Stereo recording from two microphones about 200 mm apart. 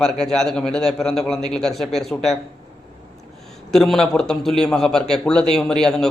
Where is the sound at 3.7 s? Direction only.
Centre (ahead or behind).